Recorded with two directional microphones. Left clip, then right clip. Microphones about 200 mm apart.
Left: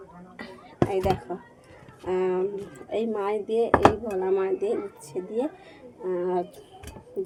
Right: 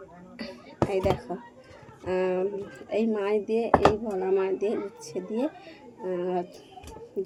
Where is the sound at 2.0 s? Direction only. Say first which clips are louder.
Left 1 dB; 5° right (ahead or behind).